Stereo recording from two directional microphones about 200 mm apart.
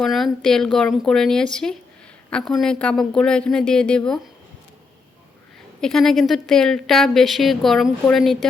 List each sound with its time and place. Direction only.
0.0 s a woman's voice: centre (ahead or behind)
5.8 s a woman's voice: centre (ahead or behind)